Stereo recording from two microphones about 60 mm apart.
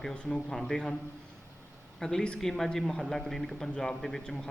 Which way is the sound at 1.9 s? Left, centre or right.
Centre.